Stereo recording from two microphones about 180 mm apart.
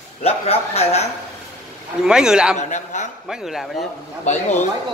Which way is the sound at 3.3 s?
Centre (ahead or behind).